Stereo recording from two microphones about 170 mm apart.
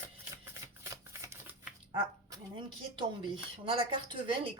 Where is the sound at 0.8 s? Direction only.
15° right (ahead or behind).